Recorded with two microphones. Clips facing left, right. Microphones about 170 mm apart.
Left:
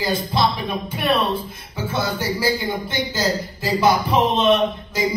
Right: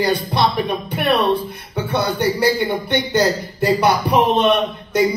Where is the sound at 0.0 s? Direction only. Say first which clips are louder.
Right 3 dB; 65° right (ahead or behind).